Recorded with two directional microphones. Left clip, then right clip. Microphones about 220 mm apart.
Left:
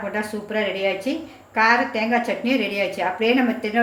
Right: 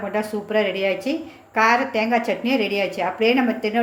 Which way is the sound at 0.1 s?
25° right (ahead or behind).